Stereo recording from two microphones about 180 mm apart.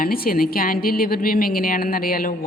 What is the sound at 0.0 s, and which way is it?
A woman's voice, 55° left (ahead or behind).